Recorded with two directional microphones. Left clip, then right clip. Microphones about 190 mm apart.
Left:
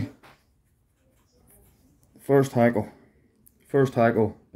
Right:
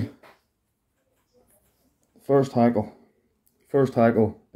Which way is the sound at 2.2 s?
20° left (ahead or behind).